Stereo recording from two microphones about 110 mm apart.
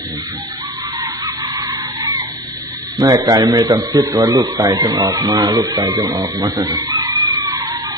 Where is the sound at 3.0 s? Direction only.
35° right (ahead or behind).